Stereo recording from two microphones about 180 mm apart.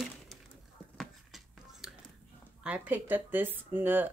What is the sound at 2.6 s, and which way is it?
Speech, 10° right (ahead or behind).